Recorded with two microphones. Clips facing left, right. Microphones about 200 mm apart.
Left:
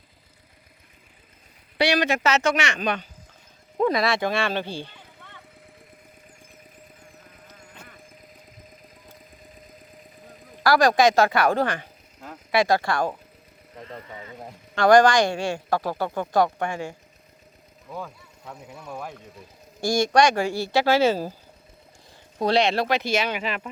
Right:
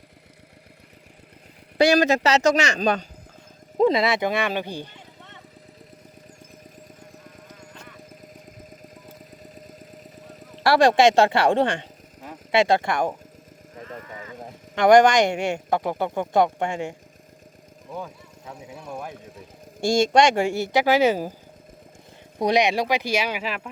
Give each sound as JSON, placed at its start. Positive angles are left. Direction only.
{"t": 1.8, "sound": "speech", "side_deg": -45}
{"t": 3.8, "sound": "speech", "side_deg": -25}
{"t": 7.3, "sound": "a sound", "side_deg": -45}
{"t": 9.0, "sound": "engine", "side_deg": -40}
{"t": 10.6, "sound": "speech", "side_deg": -25}
{"t": 13.8, "sound": "vehicle", "side_deg": 30}
{"t": 14.8, "sound": "speech", "side_deg": -20}
{"t": 18.4, "sound": "speech", "side_deg": -5}
{"t": 19.8, "sound": "speech", "side_deg": -25}
{"t": 22.4, "sound": "speech", "side_deg": -15}